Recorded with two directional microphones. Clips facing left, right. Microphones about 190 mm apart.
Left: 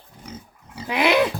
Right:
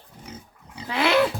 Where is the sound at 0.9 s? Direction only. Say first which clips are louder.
Left 2 dB; 15° left (ahead or behind).